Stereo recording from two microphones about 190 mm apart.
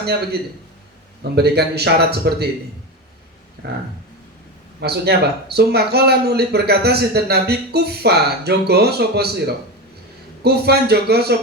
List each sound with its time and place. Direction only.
1.2 s speech: 60° right (ahead or behind)
3.6 s speech: 60° right (ahead or behind)
10.4 s speech: 60° right (ahead or behind)